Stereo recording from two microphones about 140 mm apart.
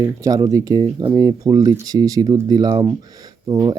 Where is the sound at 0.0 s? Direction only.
25° right (ahead or behind).